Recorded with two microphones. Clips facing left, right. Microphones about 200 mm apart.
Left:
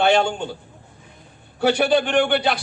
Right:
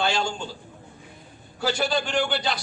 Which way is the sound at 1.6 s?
60° left (ahead or behind).